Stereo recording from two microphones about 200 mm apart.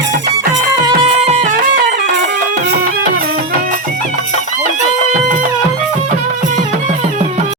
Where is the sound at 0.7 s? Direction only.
20° right (ahead or behind); by 2.1 s 40° right (ahead or behind).